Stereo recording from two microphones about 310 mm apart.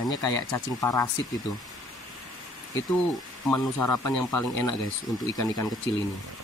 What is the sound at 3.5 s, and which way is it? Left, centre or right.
Speech, centre.